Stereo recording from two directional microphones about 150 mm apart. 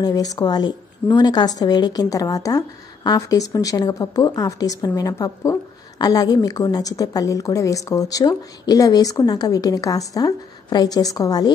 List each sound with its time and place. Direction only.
0.0 s a woman's voice: 25° left (ahead or behind)